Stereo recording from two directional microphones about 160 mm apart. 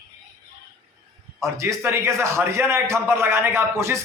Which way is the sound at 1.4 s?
15° right (ahead or behind).